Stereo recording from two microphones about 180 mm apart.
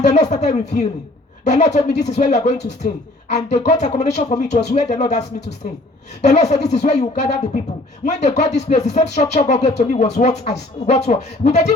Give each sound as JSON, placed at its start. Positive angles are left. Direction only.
{"t": 0.0, "sound": "speech", "side_deg": 40}
{"t": 1.5, "sound": "music", "side_deg": 40}